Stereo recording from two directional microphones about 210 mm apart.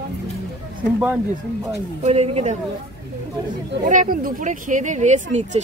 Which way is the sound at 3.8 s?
40° right (ahead or behind).